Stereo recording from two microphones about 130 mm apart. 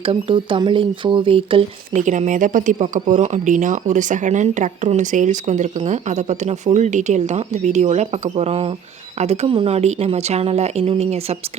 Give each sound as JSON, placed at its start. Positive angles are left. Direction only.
{"t": 0.0, "sound": "speech", "side_deg": -45}
{"t": 1.9, "sound": "speech", "side_deg": -70}